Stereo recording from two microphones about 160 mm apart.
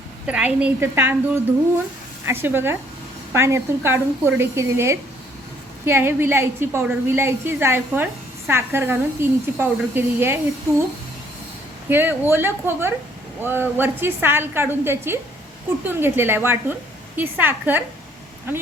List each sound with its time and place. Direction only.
0.3 s a woman's voice: 10° right (ahead or behind)
2.2 s a woman's voice: 15° right (ahead or behind)
11.9 s a woman's voice: 15° right (ahead or behind)